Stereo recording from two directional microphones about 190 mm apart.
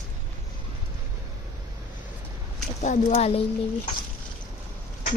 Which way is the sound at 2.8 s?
35° left (ahead or behind).